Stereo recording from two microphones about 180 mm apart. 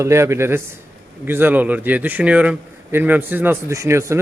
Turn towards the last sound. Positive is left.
turn(degrees=-15)  # may be behind; listen again after turning